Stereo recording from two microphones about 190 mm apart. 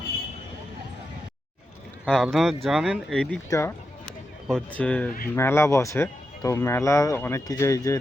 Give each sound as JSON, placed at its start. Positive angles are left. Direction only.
{"t": 2.0, "sound": "speech", "side_deg": 0}
{"t": 3.5, "sound": "speech", "side_deg": 15}